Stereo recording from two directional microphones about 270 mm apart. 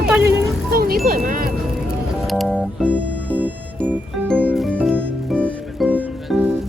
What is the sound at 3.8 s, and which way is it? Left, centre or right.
Music, centre.